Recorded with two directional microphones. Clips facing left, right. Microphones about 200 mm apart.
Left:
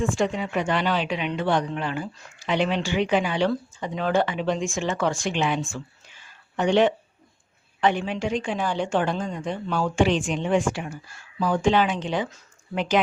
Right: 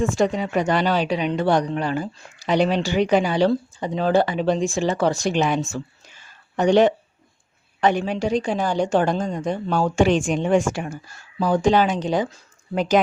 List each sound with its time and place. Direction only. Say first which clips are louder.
0.0 s speech: right 4 dB; 40° right (ahead or behind)